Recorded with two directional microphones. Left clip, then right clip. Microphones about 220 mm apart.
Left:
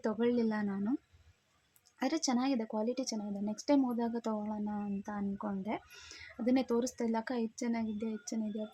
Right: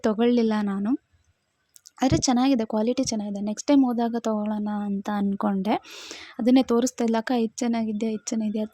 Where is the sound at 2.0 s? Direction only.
35° right (ahead or behind).